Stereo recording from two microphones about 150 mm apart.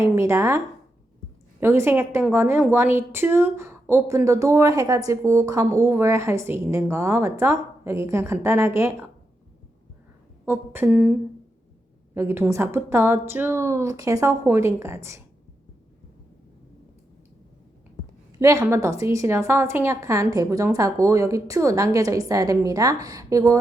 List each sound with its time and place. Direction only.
0.0 s speech: 20° right (ahead or behind)
1.6 s a woman's voice: 15° right (ahead or behind)
10.4 s a woman's voice: 15° right (ahead or behind)
12.1 s a woman's voice: 15° right (ahead or behind)
18.3 s a woman's voice: 20° right (ahead or behind)